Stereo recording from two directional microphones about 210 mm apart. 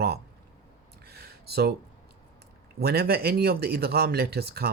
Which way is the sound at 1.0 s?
50° right (ahead or behind).